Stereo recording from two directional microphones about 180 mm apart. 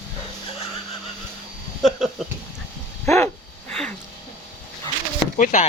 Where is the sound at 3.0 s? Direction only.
15° left (ahead or behind).